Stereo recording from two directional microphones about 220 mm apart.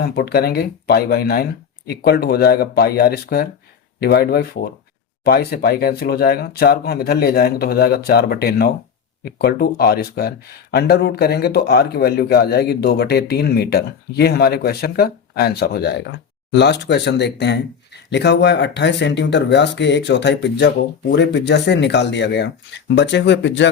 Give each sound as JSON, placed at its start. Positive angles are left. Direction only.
{"t": 0.0, "sound": "speech", "side_deg": 45}